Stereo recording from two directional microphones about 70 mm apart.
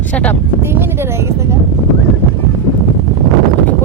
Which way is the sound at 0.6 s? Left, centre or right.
Right.